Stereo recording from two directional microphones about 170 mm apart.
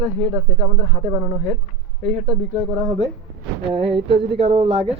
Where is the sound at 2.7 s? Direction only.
20° right (ahead or behind).